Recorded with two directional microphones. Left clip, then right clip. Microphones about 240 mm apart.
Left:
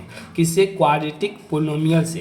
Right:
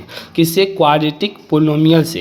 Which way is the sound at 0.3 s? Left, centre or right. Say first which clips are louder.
Right 4 dB; right.